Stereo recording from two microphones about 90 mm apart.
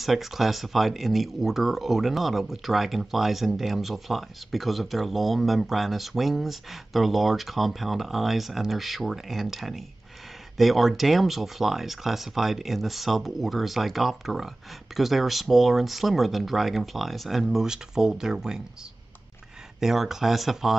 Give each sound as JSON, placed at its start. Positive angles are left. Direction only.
{"t": 0.0, "sound": "speech", "side_deg": 0}
{"t": 19.8, "sound": "speech", "side_deg": -5}